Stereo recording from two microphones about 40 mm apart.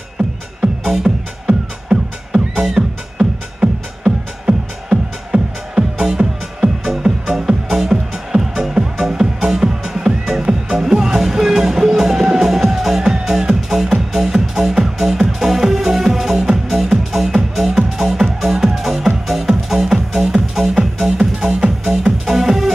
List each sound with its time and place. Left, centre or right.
0.6 s music: centre
2.8 s music: right; by 21.1 s centre
21.2 s music: centre